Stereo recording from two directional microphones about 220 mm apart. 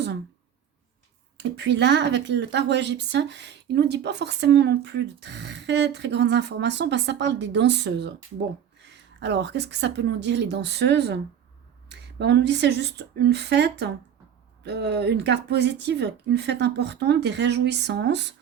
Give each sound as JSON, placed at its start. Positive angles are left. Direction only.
{"t": 1.4, "sound": "a woman's voice", "side_deg": -50}